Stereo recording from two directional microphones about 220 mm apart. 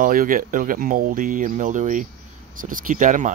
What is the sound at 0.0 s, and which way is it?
Speech, 40° right (ahead or behind).